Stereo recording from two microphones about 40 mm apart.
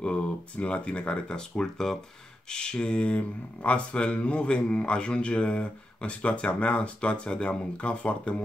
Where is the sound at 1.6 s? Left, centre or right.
Centre.